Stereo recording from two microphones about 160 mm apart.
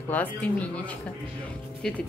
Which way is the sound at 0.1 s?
10° left (ahead or behind).